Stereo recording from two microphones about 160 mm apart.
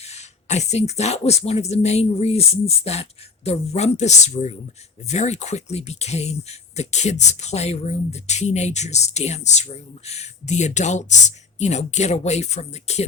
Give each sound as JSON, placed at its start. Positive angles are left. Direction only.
{"t": 0.0, "sound": "speech", "side_deg": 45}